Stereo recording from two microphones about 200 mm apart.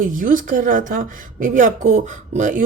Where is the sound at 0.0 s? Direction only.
40° right (ahead or behind).